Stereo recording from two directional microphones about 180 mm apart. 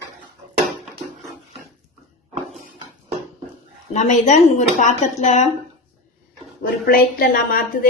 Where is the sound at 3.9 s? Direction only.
40° left (ahead or behind).